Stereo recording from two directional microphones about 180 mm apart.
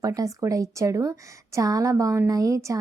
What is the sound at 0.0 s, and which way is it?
A woman's voice, 20° right (ahead or behind).